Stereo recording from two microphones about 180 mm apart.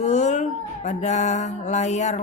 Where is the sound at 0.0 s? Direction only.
40° left (ahead or behind).